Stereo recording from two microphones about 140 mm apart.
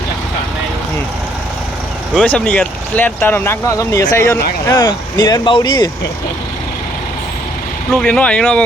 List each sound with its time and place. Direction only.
2.1 s speech: 10° left (ahead or behind); by 5.9 s 30° left (ahead or behind)
7.9 s speech: 5° left (ahead or behind)